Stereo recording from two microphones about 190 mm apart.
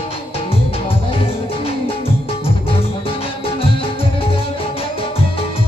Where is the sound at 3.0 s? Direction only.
30° left (ahead or behind).